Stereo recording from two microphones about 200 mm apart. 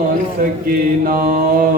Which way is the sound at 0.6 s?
45° right (ahead or behind).